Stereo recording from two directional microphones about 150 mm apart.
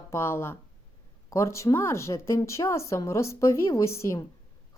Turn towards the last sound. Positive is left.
turn(degrees=20)  # may be behind; listen again after turning